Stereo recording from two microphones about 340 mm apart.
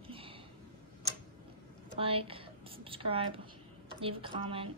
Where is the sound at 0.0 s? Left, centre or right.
Centre.